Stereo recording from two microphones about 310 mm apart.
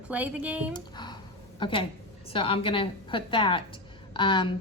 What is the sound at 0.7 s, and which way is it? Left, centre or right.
A woman's voice, centre.